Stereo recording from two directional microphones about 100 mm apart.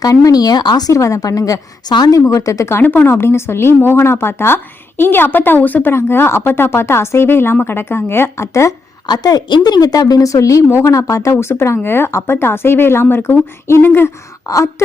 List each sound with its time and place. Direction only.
0.0 s a woman's voice: 35° left (ahead or behind)
9.0 s a woman's voice: 40° left (ahead or behind)